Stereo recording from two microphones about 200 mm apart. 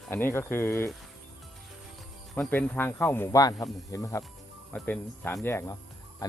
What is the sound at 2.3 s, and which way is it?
Speech, 5° left (ahead or behind).